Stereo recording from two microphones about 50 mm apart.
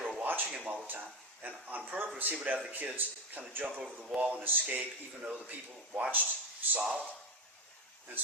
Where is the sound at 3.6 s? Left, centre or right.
Right.